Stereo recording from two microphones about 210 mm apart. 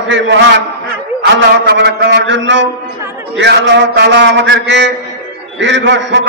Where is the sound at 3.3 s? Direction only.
55° right (ahead or behind).